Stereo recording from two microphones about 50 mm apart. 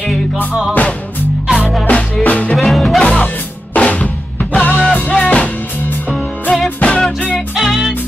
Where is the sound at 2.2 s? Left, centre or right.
Left.